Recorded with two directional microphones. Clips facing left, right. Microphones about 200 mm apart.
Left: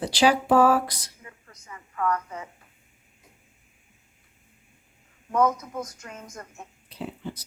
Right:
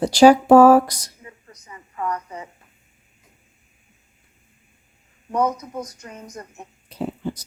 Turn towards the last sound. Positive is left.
turn(degrees=-45)  # may be behind; listen again after turning